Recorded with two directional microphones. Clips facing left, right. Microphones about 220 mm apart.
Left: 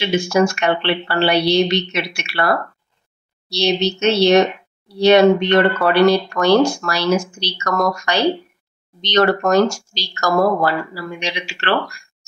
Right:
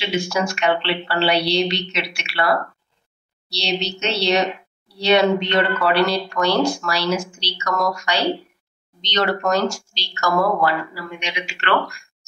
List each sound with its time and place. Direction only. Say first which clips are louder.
0.1 s speech: left 7 dB; 45° left (ahead or behind)
3.5 s speech: left 7 dB; 50° left (ahead or behind); by 11.7 s 35° left (ahead or behind)